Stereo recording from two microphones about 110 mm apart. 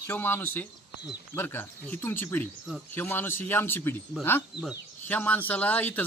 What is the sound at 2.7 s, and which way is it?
Speech, 5° right (ahead or behind).